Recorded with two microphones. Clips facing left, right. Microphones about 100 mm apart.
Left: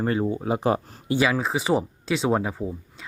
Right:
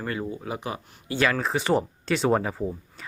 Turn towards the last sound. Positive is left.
turn(degrees=0)  # may be behind; listen again after turning